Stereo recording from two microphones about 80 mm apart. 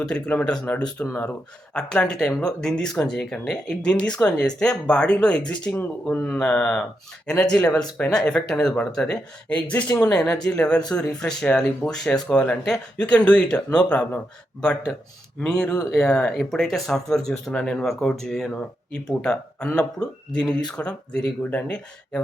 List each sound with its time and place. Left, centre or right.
0.0 s speech: centre
5.7 s speech: left
6.2 s speech: centre